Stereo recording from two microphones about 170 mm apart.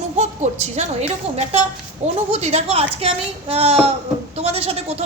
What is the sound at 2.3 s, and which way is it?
A woman's voice, 40° right (ahead or behind).